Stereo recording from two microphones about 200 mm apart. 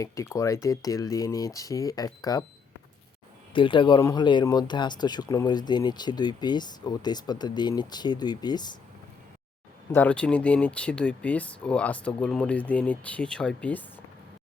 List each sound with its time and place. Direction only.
0.0 s speech: 15° left (ahead or behind)
3.5 s speech: 25° left (ahead or behind)
9.9 s speech: 10° left (ahead or behind)